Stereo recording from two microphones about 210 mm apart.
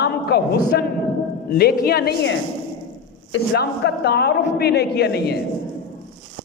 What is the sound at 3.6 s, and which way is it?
A man's voice, 55° left (ahead or behind).